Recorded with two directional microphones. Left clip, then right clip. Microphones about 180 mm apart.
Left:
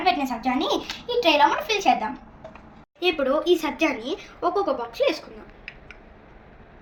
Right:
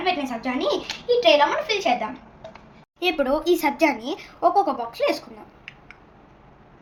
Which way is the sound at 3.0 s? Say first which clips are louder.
Even; 50° right (ahead or behind).